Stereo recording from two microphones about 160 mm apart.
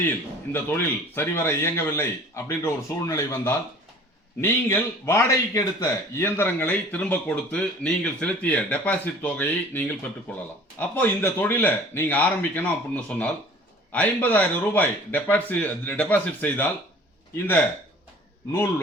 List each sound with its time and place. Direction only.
0.5 s a man's voice: 15° left (ahead or behind)